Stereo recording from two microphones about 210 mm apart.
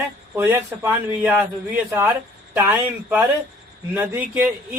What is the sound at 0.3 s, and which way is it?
A man's voice, 10° right (ahead or behind).